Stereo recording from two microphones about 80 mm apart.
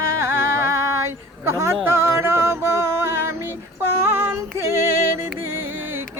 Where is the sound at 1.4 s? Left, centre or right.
Right.